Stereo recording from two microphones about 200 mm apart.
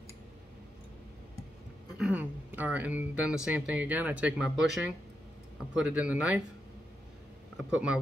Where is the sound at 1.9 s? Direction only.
5° right (ahead or behind).